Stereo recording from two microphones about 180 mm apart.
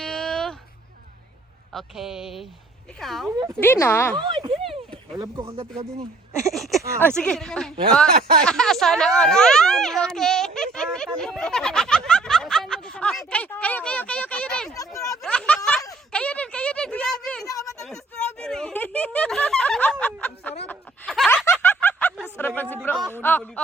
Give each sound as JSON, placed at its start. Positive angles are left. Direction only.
{"t": 0.0, "sound": "a sound", "side_deg": 5}
{"t": 1.7, "sound": "speech", "side_deg": 0}
{"t": 3.6, "sound": "speech", "side_deg": 10}
{"t": 4.3, "sound": "speech", "side_deg": -30}
{"t": 6.4, "sound": "a sound", "side_deg": 0}
{"t": 7.0, "sound": "speech", "side_deg": 5}
{"t": 14.7, "sound": "speech", "side_deg": 20}
{"t": 15.2, "sound": "a sound", "side_deg": 5}
{"t": 17.4, "sound": "speech", "side_deg": 20}
{"t": 17.8, "sound": "speech", "side_deg": 5}
{"t": 21.2, "sound": "snicker", "side_deg": 10}
{"t": 22.4, "sound": "speech", "side_deg": 10}